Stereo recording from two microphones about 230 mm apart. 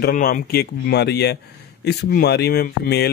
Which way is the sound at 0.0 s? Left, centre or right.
Left.